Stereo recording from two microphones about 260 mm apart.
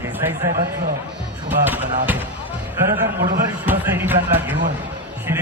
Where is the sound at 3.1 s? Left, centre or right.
Right.